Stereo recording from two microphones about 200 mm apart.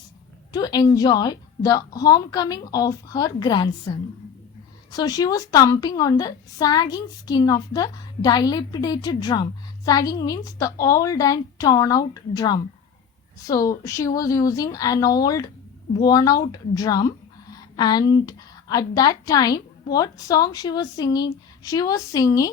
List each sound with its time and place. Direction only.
0.5 s a woman's voice: 20° left (ahead or behind)